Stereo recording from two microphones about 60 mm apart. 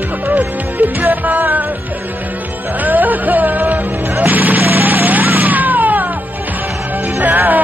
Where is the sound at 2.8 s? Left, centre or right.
Right.